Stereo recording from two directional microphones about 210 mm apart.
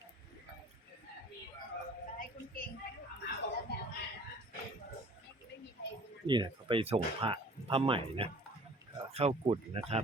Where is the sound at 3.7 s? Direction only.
50° left (ahead or behind).